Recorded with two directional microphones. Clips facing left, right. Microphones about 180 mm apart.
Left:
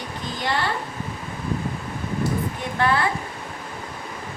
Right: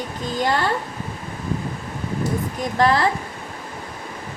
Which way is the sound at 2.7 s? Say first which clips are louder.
Right 4 dB; 35° right (ahead or behind).